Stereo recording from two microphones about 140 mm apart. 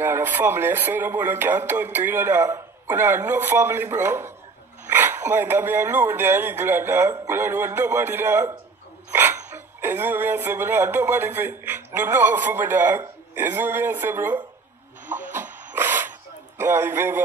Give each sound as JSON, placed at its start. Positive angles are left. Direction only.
{"t": 0.0, "sound": "speech", "side_deg": -15}
{"t": 9.8, "sound": "speech", "side_deg": -15}
{"t": 15.3, "sound": "printer", "side_deg": -15}
{"t": 16.5, "sound": "speech", "side_deg": -15}